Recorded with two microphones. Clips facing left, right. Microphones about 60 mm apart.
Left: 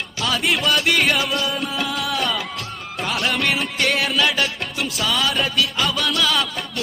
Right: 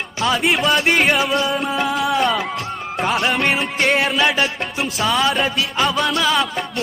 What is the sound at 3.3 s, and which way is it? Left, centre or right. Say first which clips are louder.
Music: right 3 dB; right.